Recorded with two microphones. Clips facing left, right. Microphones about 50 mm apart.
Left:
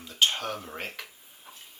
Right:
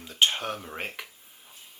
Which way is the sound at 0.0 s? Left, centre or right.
Centre.